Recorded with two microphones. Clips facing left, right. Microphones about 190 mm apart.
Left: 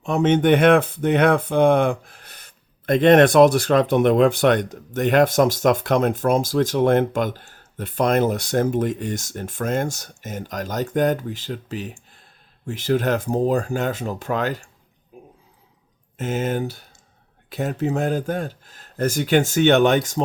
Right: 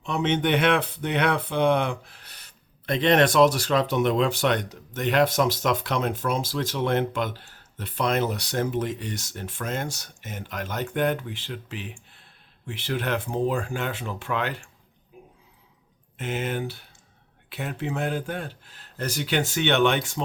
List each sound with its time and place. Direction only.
0.0 s speech: 45° left (ahead or behind)
15.1 s a sound: 45° left (ahead or behind)
16.1 s speech: 45° left (ahead or behind)